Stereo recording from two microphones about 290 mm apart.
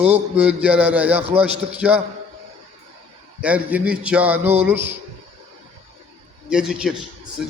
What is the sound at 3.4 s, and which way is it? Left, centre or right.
A man's voice, centre.